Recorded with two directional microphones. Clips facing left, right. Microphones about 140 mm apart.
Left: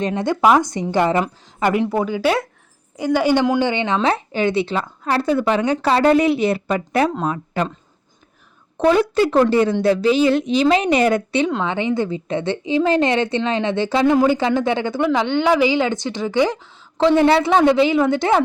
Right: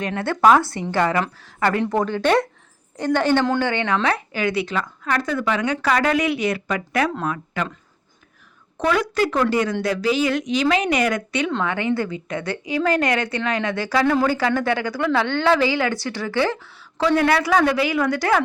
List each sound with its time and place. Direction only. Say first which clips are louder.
0.0 s a woman's voice: left 1 dB; 20° left (ahead or behind)
8.8 s a woman's voice: left 5 dB; 30° left (ahead or behind)
11.6 s a woman's voice: left 2 dB; 20° left (ahead or behind)